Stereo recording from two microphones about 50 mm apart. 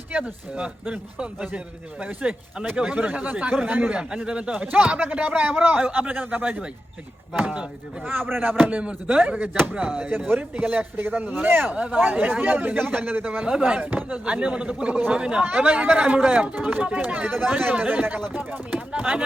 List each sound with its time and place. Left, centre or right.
0.1 s speech: centre
7.4 s speech: centre
8.3 s speech: right
8.7 s speech: right
10.1 s speech: right
10.5 s speech: right
10.8 s a man's voice: right
11.1 s speech: right
11.7 s speech: right
13.4 s speech: right
16.6 s speech: right
18.9 s speech: right